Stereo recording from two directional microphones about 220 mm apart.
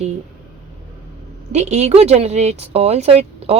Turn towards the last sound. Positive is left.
turn(degrees=-25)  # may be behind; listen again after turning